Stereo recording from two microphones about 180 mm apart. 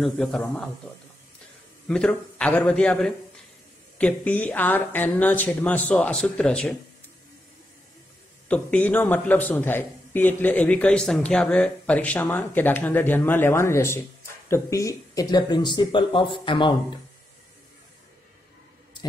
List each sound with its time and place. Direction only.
0.0 s a man's voice: 5° left (ahead or behind)
1.9 s a man's voice: 5° left (ahead or behind)
8.5 s a man's voice: 10° left (ahead or behind); by 17.0 s 25° left (ahead or behind)